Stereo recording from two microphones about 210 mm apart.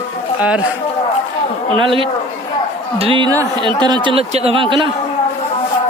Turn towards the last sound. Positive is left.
turn(degrees=-25)  # may be behind; listen again after turning